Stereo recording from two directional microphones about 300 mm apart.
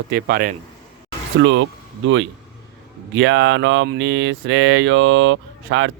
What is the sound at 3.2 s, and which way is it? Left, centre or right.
Speech, right.